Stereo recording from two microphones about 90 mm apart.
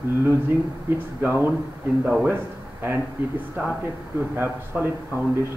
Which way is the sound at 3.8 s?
25° right (ahead or behind).